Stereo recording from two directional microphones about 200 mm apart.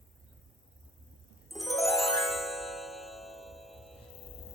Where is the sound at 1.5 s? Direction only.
Centre (ahead or behind).